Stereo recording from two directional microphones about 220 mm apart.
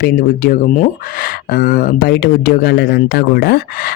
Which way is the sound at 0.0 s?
45° left (ahead or behind).